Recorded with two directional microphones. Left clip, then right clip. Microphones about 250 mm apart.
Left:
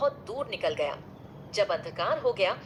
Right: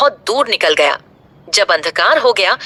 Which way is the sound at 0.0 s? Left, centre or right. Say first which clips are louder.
Right 16 dB; right.